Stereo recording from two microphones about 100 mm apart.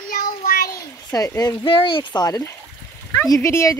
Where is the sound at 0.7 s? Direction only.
35° left (ahead or behind).